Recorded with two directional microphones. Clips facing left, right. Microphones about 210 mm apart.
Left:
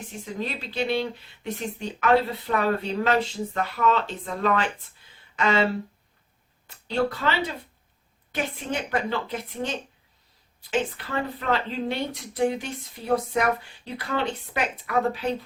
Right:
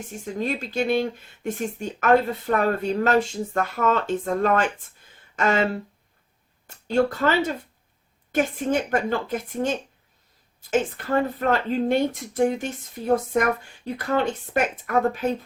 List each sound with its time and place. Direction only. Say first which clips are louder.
0.3 s speech: right 5 dB; 45° right (ahead or behind)
6.7 s speech: right 4 dB; 45° right (ahead or behind)